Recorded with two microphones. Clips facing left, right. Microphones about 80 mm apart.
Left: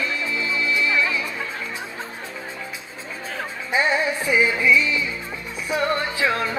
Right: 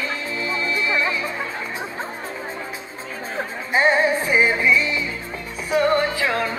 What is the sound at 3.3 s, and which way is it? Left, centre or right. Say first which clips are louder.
Music: right 2 dB; right.